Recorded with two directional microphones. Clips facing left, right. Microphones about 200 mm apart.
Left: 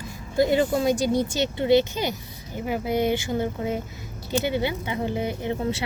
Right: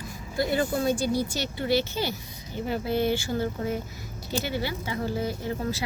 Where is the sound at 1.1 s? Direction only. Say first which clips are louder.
Left 4 dB; 20° left (ahead or behind).